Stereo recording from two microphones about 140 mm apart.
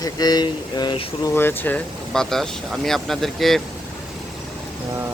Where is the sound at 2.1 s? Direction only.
5° left (ahead or behind).